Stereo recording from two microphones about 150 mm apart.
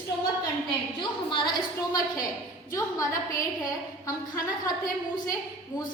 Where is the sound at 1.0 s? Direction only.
30° left (ahead or behind).